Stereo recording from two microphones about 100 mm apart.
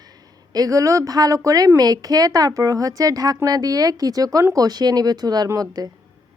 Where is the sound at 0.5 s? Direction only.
35° right (ahead or behind).